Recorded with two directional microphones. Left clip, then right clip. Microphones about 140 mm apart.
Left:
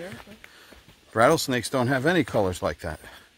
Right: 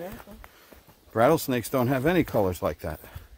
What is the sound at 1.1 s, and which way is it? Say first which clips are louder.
Speech: left 2 dB; 10° right (ahead or behind).